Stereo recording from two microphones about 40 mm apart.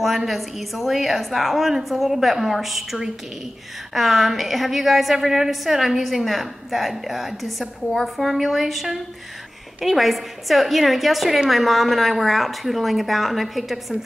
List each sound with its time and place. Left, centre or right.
0.0 s a woman's voice: centre